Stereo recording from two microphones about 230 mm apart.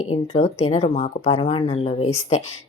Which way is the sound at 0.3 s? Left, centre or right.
Left.